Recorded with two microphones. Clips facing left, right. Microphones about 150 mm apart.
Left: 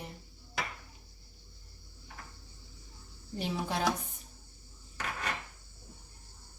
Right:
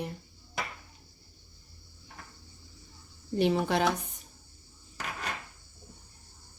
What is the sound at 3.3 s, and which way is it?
Speech, 70° right (ahead or behind).